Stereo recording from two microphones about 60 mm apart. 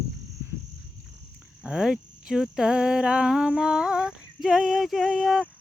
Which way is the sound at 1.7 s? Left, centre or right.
Centre.